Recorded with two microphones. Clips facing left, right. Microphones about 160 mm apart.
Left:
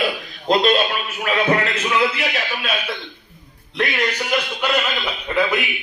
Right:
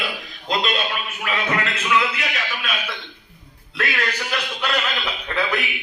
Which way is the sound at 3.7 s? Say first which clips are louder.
Left 4 dB; 20° left (ahead or behind).